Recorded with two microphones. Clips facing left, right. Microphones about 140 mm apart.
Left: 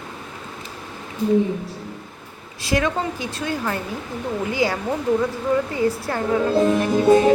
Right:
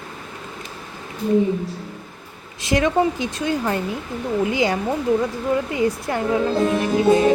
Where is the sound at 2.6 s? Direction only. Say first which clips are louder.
Right 4 dB; 20° right (ahead or behind).